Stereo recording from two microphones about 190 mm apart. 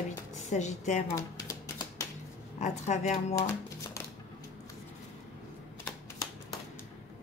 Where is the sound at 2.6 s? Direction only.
35° left (ahead or behind).